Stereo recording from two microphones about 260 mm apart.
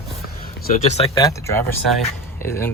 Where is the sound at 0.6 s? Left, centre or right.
Left.